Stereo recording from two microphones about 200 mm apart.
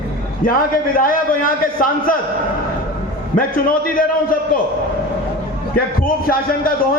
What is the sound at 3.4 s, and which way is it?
A man's voice, 45° left (ahead or behind).